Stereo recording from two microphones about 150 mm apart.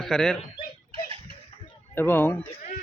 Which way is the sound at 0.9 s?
40° right (ahead or behind).